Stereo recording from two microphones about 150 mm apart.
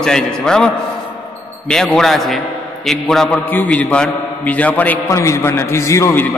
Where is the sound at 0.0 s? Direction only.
5° left (ahead or behind).